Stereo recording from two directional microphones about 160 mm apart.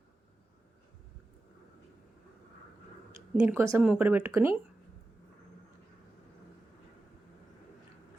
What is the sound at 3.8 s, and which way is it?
Speech, 5° right (ahead or behind).